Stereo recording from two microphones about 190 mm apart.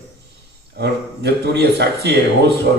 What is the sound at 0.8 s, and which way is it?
A man's voice, 60° right (ahead or behind).